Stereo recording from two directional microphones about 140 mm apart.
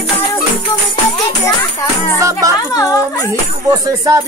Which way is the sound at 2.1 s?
20° right (ahead or behind).